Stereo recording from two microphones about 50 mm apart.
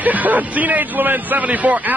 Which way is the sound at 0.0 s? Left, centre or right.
Right.